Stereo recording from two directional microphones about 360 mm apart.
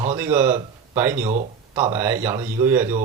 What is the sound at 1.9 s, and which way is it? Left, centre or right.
Speech, centre.